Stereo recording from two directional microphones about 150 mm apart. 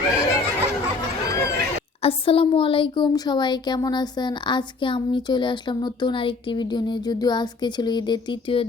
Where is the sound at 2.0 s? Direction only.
40° left (ahead or behind).